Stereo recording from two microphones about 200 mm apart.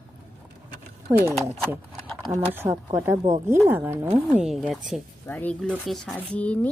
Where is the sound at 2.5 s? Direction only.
15° right (ahead or behind).